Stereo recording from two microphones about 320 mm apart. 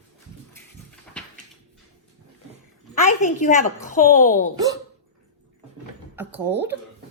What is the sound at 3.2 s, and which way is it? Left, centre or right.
A woman's voice, left.